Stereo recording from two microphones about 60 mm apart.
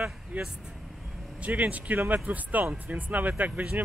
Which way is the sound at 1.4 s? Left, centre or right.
Right.